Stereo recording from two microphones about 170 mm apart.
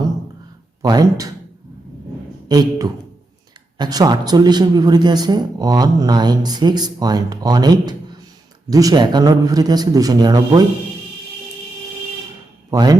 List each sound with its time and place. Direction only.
0.8 s speech: 20° right (ahead or behind)
2.5 s speech: 20° right (ahead or behind)
12.7 s speech: 20° right (ahead or behind)